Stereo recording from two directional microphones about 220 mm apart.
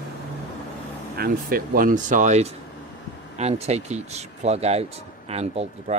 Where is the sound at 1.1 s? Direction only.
45° right (ahead or behind).